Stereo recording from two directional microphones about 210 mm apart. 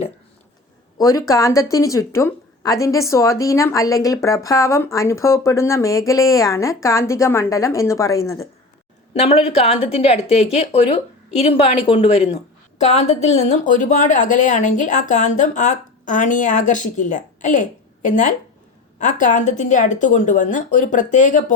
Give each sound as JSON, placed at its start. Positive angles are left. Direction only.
{"t": 0.9, "sound": "a woman's voice", "side_deg": 15}
{"t": 9.1, "sound": "speech", "side_deg": 30}